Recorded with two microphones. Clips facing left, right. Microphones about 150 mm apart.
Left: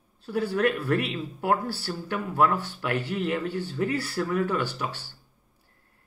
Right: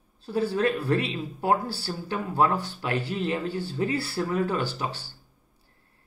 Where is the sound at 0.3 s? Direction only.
25° right (ahead or behind).